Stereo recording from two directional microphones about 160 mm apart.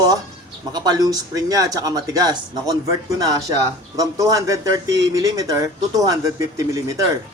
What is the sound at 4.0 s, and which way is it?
Speech, 20° right (ahead or behind).